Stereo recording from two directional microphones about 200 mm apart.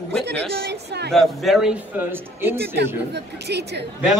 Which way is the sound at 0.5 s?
55° right (ahead or behind).